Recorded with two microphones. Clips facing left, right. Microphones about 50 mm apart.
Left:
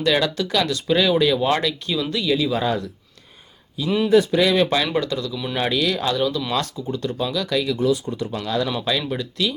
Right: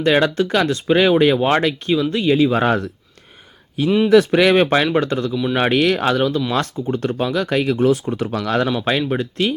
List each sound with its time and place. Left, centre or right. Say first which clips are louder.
0.0 s speech: right 4 dB; right
2.6 s speech: right 5 dB; right
3.8 s speech: right 5 dB; centre
4.1 s speech: right 3 dB; right
4.5 s speech: right 4 dB; right
8.8 s speech: right 4 dB; right